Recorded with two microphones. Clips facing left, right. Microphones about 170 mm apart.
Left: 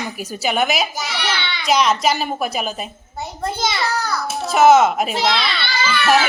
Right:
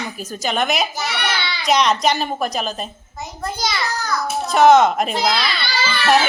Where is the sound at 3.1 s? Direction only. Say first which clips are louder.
Left 3 dB; 30° left (ahead or behind).